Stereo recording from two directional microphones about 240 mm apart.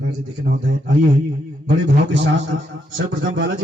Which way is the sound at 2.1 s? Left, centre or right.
Right.